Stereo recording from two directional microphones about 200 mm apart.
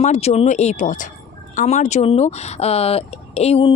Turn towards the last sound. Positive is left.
turn(degrees=30)  # may be behind; listen again after turning